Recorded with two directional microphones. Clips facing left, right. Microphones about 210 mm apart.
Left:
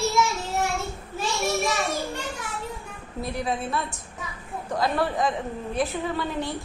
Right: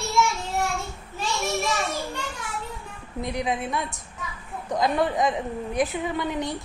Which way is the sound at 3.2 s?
20° right (ahead or behind).